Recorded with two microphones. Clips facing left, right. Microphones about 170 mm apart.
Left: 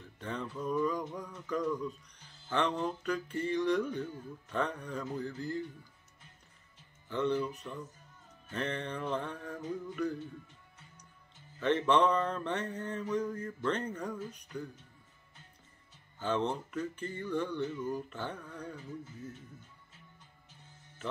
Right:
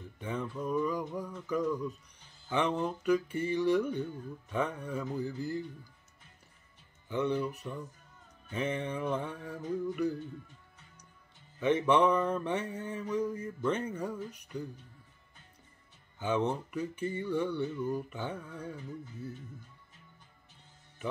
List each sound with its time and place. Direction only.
0.0 s speech: 10° right (ahead or behind)
1.3 s mantra: 10° right (ahead or behind)
7.1 s mantra: 15° right (ahead or behind)
11.6 s mantra: 10° right (ahead or behind)
16.2 s mantra: 15° right (ahead or behind)